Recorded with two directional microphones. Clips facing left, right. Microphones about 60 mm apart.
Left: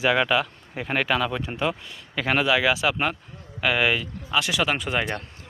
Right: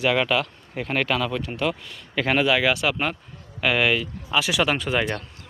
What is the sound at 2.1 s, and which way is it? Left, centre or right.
Speech, centre.